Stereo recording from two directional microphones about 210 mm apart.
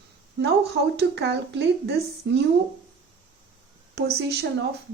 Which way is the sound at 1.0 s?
55° right (ahead or behind).